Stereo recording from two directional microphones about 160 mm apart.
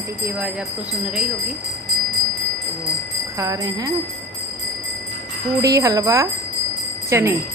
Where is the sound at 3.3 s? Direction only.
20° right (ahead or behind).